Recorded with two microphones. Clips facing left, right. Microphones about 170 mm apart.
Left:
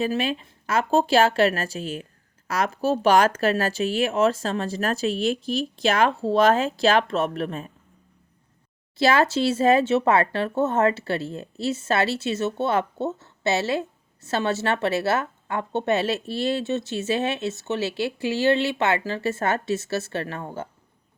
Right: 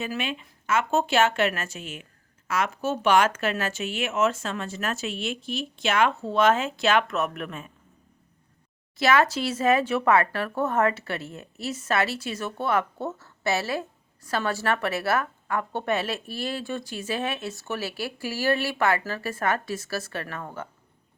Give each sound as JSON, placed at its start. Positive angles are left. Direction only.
{"t": 0.0, "sound": "speech", "side_deg": 35}
{"t": 9.0, "sound": "speech", "side_deg": 30}